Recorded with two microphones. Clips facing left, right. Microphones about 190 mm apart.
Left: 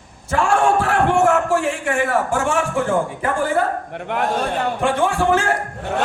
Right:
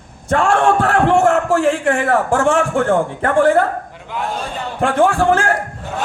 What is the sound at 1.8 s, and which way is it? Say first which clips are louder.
A man's voice: right 4 dB; 55° right (ahead or behind).